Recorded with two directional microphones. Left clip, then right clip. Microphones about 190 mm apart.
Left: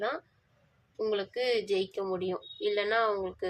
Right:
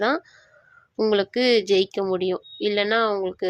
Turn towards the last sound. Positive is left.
turn(degrees=-35)  # may be behind; listen again after turning